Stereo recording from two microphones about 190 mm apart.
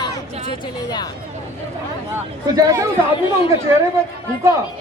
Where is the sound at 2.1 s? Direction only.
15° right (ahead or behind).